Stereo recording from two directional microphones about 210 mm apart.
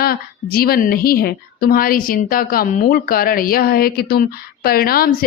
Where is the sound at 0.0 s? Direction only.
45° left (ahead or behind).